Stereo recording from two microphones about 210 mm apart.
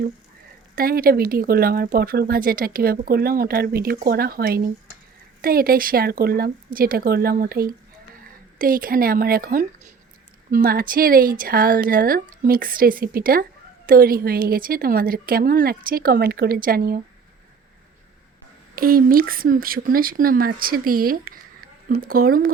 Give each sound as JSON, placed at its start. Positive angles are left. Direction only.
{"t": 0.8, "sound": "speech", "side_deg": -45}
{"t": 18.8, "sound": "speech", "side_deg": -45}